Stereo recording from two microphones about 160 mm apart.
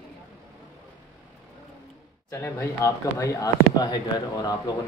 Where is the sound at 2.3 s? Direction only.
20° left (ahead or behind).